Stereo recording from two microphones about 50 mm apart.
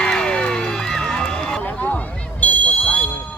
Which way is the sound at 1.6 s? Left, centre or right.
Left.